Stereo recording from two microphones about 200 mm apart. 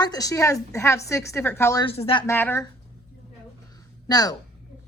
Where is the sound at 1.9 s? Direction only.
30° left (ahead or behind).